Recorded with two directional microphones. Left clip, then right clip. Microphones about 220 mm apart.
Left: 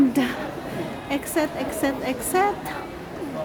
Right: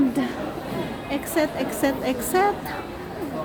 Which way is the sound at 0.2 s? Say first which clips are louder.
Left 3 dB; 20° left (ahead or behind).